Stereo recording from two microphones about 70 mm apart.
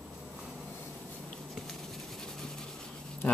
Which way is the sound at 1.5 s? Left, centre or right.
Centre.